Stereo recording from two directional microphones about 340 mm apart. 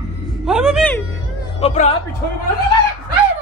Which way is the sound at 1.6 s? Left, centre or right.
Centre.